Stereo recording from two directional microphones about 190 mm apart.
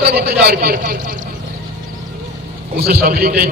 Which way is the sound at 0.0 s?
60° right (ahead or behind).